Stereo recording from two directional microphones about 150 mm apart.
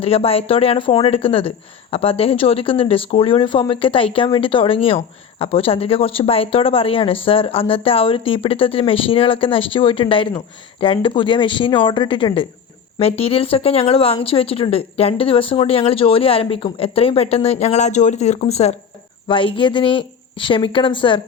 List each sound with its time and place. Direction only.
0.0 s speech: 40° left (ahead or behind)
19.3 s speech: 35° left (ahead or behind)